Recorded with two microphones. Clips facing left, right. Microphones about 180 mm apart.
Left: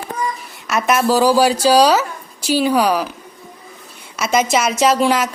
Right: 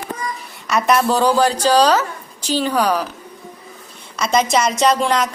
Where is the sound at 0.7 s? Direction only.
5° left (ahead or behind).